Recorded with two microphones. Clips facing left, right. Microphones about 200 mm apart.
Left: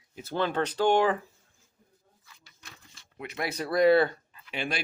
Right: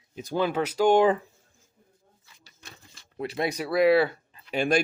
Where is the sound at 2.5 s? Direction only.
35° right (ahead or behind).